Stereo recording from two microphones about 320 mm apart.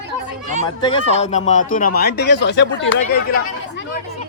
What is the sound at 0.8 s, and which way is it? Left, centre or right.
Speech, centre.